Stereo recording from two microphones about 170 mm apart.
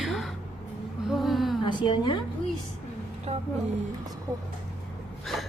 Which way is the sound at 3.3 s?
40° right (ahead or behind).